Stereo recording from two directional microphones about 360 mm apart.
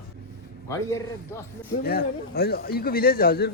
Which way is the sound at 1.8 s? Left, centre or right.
Left.